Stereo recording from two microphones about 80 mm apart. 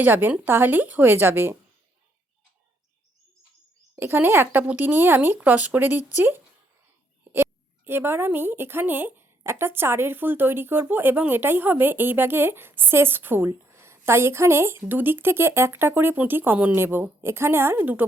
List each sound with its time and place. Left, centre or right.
0.0 s speech: right
4.0 s a woman's voice: right